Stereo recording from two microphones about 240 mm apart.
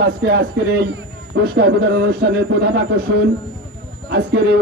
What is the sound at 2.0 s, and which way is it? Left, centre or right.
Speech, right.